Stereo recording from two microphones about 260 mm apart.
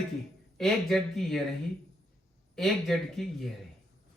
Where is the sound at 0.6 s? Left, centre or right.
Centre.